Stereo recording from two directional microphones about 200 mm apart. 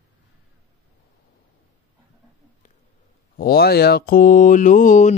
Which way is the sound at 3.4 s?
50° left (ahead or behind).